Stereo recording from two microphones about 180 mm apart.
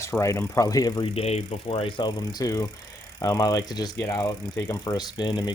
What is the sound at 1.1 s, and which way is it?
Speech, 35° left (ahead or behind).